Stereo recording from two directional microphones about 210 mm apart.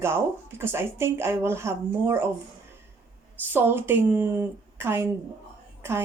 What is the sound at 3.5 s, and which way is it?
A woman's voice, 10° right (ahead or behind).